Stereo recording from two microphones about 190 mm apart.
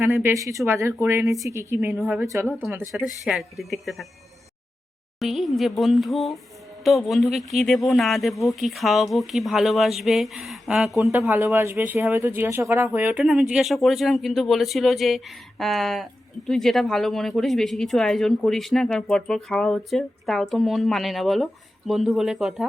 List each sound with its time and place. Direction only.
0.0 s speech: 15° right (ahead or behind)
2.5 s speech: 5° left (ahead or behind)
2.9 s speech: 5° right (ahead or behind)
5.2 s speech: centre (ahead or behind)
11.5 s speech: 15° right (ahead or behind)